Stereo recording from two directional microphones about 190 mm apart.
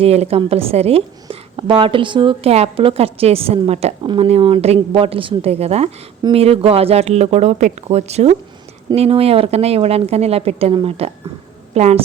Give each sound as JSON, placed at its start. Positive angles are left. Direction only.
{"t": 0.0, "sound": "a woman's voice", "side_deg": -35}